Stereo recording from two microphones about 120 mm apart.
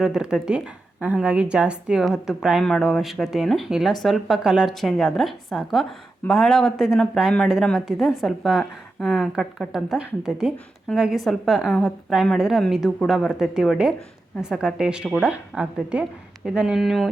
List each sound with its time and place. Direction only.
0.0 s a woman's voice: 5° right (ahead or behind)